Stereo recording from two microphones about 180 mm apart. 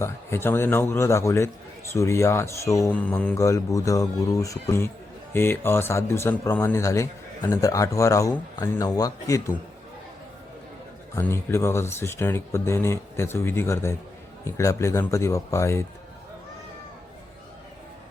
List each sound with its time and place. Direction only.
0.0 s a man's voice: 15° left (ahead or behind)
11.1 s a man's voice: 15° left (ahead or behind)